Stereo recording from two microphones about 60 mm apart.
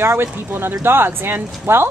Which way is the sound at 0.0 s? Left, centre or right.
Right.